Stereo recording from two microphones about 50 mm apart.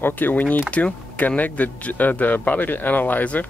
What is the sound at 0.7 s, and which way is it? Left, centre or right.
Speech, left.